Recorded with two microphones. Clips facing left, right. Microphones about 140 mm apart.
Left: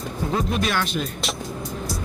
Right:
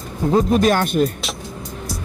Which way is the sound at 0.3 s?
45° right (ahead or behind).